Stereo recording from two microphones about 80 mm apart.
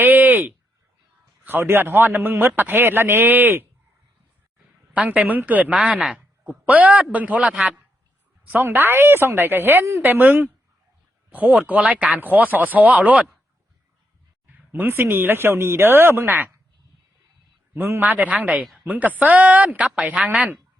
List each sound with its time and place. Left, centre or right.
0.0 s a sound: right
1.5 s speech: right
4.9 s speech: centre
14.7 s speech: right
17.7 s speech: right